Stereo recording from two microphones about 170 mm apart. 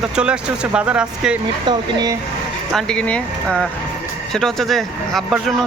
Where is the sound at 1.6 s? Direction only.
25° right (ahead or behind).